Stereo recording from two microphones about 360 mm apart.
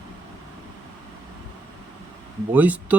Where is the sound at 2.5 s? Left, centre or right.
Centre.